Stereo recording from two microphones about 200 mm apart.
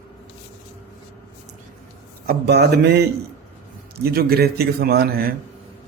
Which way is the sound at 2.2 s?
50° right (ahead or behind).